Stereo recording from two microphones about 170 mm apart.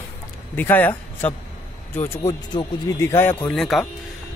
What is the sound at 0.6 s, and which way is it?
Speech, 10° left (ahead or behind).